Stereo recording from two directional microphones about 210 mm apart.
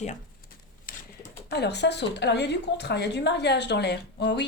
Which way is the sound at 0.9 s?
40° left (ahead or behind).